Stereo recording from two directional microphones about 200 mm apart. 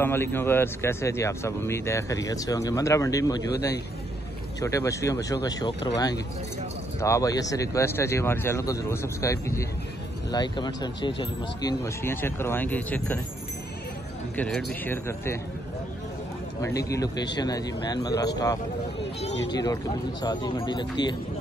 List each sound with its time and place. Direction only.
0.0 s speech: 10° left (ahead or behind)
14.3 s speech: 5° left (ahead or behind)
16.6 s speech: 15° left (ahead or behind)
19.5 s speech: 20° left (ahead or behind)